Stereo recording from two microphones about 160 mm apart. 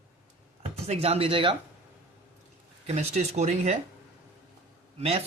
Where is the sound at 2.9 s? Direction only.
40° right (ahead or behind).